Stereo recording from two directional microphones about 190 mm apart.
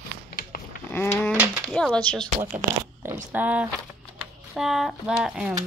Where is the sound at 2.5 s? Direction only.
10° right (ahead or behind).